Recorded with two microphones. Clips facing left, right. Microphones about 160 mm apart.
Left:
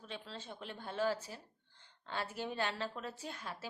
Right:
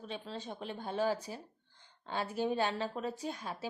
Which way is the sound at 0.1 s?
15° right (ahead or behind).